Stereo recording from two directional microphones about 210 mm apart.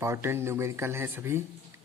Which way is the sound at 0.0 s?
10° right (ahead or behind).